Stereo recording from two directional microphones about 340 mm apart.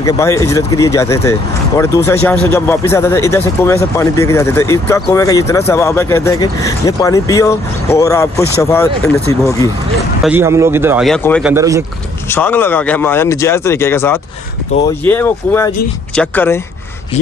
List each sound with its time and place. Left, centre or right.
0.0 s speech: centre
10.2 s speech: centre
11.5 s speech: centre
12.3 s speech: centre